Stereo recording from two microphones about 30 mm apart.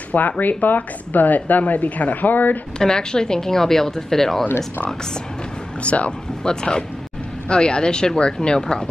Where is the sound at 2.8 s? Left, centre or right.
Left.